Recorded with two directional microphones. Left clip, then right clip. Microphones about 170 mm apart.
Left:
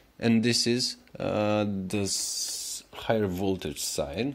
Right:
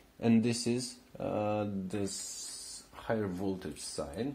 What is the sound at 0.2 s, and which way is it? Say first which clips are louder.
Speech: left 6 dB; 25° left (ahead or behind).